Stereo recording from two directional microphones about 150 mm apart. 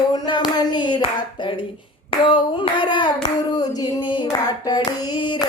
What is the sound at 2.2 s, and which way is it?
Hands, 30° left (ahead or behind).